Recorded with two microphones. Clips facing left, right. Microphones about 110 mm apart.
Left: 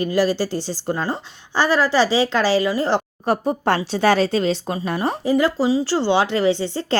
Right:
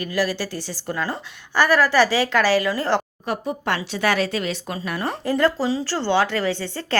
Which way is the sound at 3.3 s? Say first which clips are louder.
Left 6 dB; 35° left (ahead or behind).